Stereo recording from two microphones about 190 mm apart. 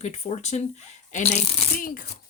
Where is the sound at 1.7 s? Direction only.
50° left (ahead or behind).